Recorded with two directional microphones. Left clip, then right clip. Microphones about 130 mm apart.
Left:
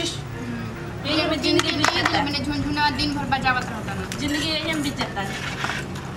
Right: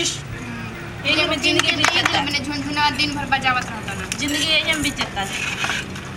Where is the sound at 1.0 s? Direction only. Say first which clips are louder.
Right 4 dB; 5° right (ahead or behind).